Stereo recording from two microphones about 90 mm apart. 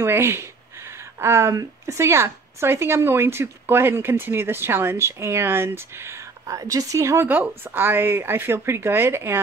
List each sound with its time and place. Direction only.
0.0 s speech: 30° right (ahead or behind)